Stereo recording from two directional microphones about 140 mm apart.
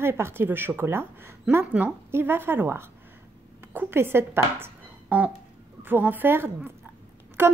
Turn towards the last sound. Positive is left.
turn(degrees=-15)  # may be behind; listen again after turning